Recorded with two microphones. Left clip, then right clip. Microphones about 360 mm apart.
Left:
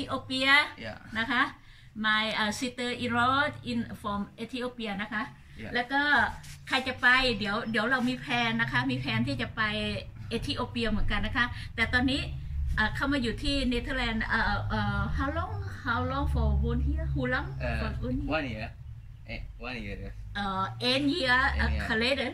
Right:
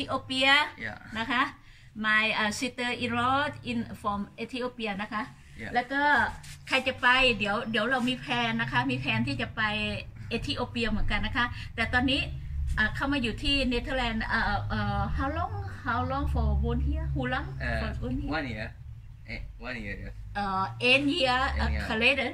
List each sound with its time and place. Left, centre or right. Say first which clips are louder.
0.0 s a woman's voice: right 3 dB; centre